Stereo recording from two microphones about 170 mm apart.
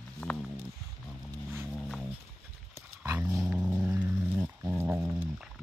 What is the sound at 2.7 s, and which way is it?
Dog, 15° right (ahead or behind).